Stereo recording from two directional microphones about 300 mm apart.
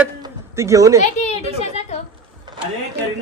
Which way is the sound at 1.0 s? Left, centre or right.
Left.